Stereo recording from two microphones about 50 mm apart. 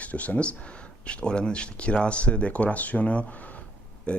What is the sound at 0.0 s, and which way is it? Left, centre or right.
Speech, left.